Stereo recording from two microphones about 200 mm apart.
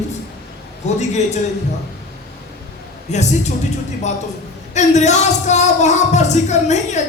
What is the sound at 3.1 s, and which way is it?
Speech, 35° left (ahead or behind).